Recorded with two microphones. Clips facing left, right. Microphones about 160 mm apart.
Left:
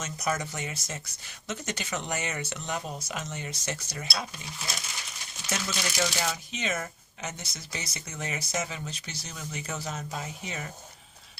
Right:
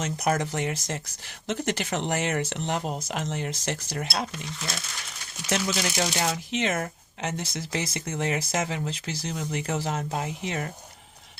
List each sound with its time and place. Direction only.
0.0 s speech: 60° right (ahead or behind)
5.5 s speech: 65° right (ahead or behind)